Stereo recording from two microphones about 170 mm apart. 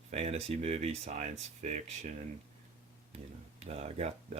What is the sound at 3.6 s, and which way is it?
Speech, 40° right (ahead or behind).